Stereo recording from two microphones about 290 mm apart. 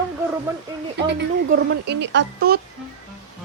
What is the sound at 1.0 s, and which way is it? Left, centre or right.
Speech, right.